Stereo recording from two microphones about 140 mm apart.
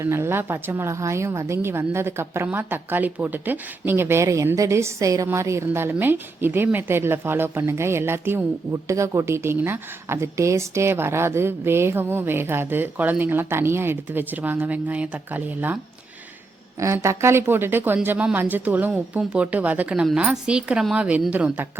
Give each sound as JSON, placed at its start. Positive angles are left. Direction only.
{"t": 0.0, "sound": "speech", "side_deg": -20}
{"t": 16.8, "sound": "speech", "side_deg": -20}